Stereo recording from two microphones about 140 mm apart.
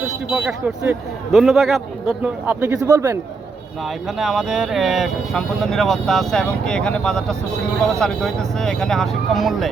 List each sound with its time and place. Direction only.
0.3 s speech: 5° right (ahead or behind)
2.5 s a man's voice: 15° right (ahead or behind)
4.2 s speech: 5° right (ahead or behind)